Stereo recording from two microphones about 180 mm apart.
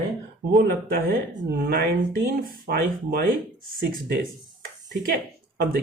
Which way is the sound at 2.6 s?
60° right (ahead or behind).